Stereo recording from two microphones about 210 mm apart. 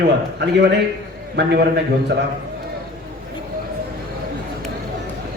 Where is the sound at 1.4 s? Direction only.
55° right (ahead or behind).